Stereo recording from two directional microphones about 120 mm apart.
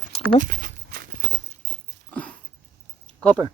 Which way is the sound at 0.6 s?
90° right.